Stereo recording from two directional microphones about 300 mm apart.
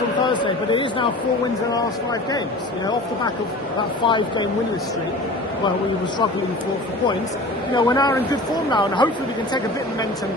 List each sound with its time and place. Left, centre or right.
0.4 s speech: centre
4.0 s speech: centre
7.8 s speech: centre